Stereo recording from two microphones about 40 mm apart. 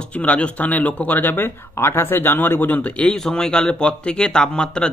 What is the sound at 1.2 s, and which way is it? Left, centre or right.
Speech, left.